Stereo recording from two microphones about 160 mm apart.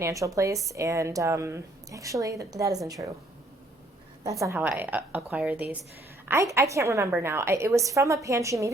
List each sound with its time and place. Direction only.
0.0 s a woman's voice: 20° right (ahead or behind)
4.2 s a woman's voice: 20° right (ahead or behind)